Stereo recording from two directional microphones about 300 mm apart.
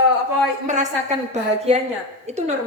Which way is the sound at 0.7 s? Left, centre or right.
Right.